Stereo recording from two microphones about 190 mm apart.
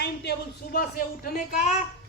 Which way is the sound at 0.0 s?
60° left (ahead or behind).